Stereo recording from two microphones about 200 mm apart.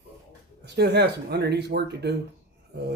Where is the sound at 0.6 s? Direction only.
55° right (ahead or behind).